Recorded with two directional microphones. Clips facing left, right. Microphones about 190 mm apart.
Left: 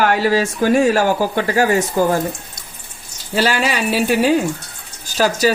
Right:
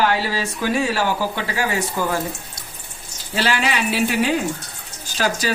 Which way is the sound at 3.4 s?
40° left (ahead or behind).